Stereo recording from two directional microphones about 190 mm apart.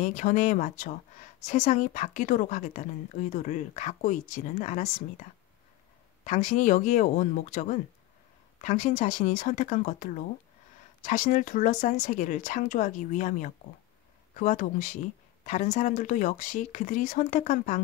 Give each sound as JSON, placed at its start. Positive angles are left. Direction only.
{"t": 0.0, "sound": "a woman's voice", "side_deg": 40}
{"t": 6.2, "sound": "a woman's voice", "side_deg": 40}